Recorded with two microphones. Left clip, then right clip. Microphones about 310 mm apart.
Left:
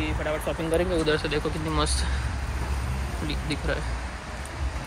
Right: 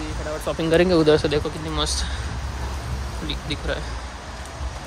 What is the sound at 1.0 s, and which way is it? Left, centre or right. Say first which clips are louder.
Speech: right 7 dB; centre.